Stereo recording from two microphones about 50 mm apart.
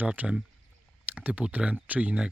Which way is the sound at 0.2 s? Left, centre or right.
Right.